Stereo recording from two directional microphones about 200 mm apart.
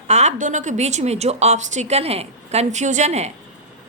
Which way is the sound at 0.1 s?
35° right (ahead or behind).